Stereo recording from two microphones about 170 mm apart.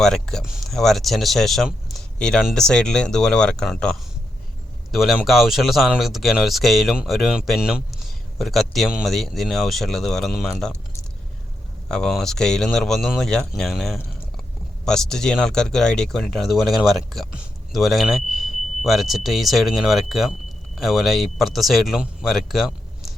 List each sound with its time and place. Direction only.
0.0 s speech: 5° left (ahead or behind)
11.9 s speech: 5° left (ahead or behind)